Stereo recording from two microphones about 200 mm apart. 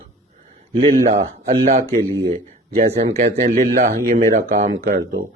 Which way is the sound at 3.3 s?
40° right (ahead or behind).